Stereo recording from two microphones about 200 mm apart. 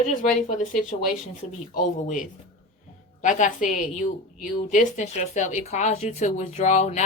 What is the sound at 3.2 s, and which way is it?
A woman's voice, 40° left (ahead or behind).